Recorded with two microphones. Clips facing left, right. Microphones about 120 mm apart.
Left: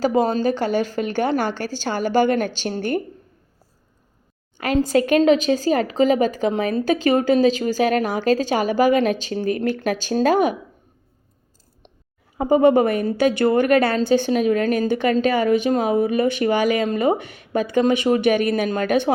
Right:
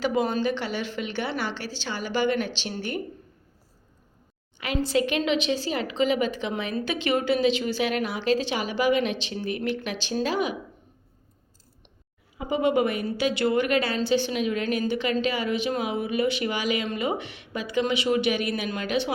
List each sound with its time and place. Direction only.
0.0 s a woman's voice: 40° left (ahead or behind)
4.5 s a woman's voice: 45° left (ahead or behind)
12.4 s a woman's voice: 50° left (ahead or behind)